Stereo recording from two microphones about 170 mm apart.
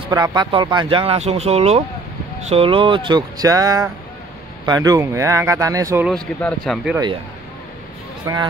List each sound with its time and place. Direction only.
0.1 s speech: 20° right (ahead or behind)
6.0 s speech: 5° left (ahead or behind)
8.3 s speech: 20° right (ahead or behind)